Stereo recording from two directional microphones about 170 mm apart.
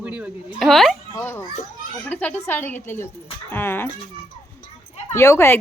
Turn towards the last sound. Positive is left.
turn(degrees=15)  # may be behind; listen again after turning